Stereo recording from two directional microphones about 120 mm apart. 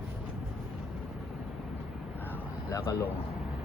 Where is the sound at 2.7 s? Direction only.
25° left (ahead or behind).